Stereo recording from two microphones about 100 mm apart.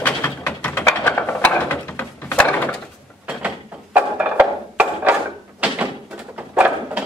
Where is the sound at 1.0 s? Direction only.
15° left (ahead or behind).